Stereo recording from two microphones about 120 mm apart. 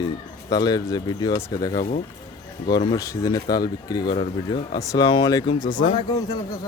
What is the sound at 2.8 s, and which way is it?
Speech, 25° left (ahead or behind).